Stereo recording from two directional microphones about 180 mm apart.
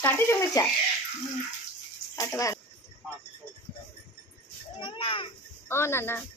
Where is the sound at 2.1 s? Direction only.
15° left (ahead or behind).